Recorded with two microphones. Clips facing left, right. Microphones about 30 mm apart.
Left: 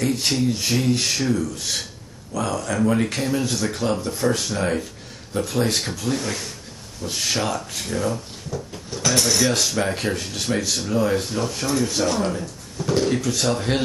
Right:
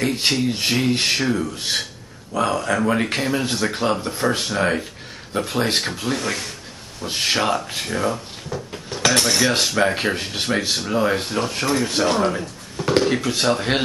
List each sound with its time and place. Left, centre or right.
0.0 s speech: right
8.9 s dishes: right
9.2 s speech: right